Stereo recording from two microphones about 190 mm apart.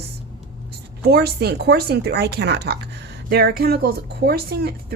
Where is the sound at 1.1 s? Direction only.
55° right (ahead or behind).